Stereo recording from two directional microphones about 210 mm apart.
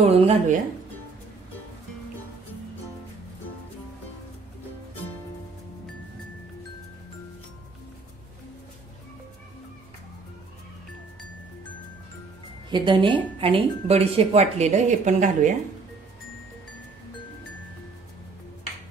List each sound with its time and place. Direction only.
0.0 s speech: 30° right (ahead or behind)
12.6 s speech: 20° right (ahead or behind)